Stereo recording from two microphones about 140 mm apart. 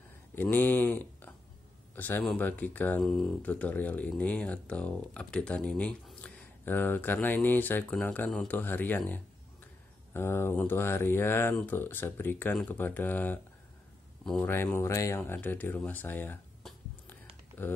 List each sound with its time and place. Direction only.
0.4 s a man's voice: 15° left (ahead or behind)
14.4 s speech: 15° left (ahead or behind)
17.6 s speech: 15° left (ahead or behind)